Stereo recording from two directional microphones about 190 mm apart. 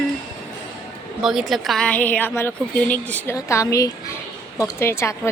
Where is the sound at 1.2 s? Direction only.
Centre (ahead or behind).